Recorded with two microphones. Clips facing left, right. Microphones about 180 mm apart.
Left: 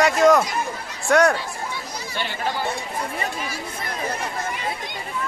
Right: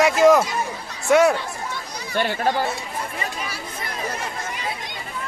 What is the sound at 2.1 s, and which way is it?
Speech, 50° right (ahead or behind).